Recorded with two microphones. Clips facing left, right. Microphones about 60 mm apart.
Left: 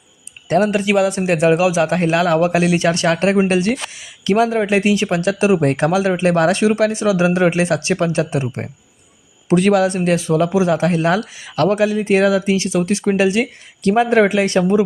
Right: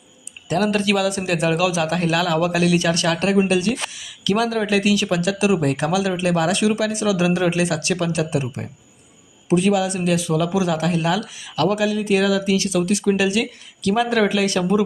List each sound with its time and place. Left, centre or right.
0.6 s a man's voice: left
9.5 s a man's voice: left